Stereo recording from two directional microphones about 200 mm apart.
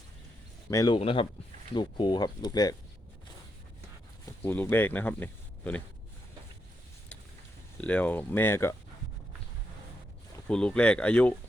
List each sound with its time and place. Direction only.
0.7 s speech: 15° left (ahead or behind)
0.9 s speech: 25° left (ahead or behind)
4.4 s speech: 10° left (ahead or behind)
7.8 s speech: 5° left (ahead or behind)
10.5 s speech: 5° left (ahead or behind)